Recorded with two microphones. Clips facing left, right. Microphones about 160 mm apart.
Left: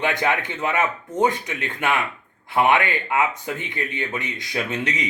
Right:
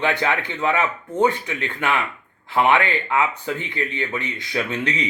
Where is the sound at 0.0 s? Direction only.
15° left (ahead or behind).